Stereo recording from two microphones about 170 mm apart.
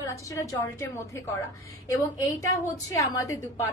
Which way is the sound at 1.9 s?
20° left (ahead or behind).